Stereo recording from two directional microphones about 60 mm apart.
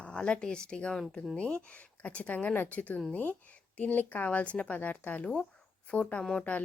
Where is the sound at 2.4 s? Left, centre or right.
Left.